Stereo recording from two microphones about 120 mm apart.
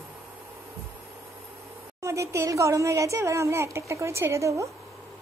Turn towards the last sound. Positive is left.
turn(degrees=-25)  # may be behind; listen again after turning